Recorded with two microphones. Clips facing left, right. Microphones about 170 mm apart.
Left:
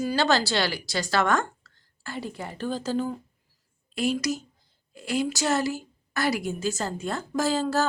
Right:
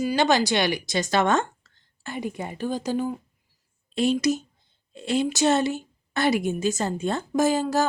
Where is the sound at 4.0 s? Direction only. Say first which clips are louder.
Right 4 dB; 25° right (ahead or behind).